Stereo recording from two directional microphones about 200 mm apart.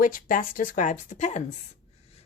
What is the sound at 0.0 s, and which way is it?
Speech, 45° left (ahead or behind).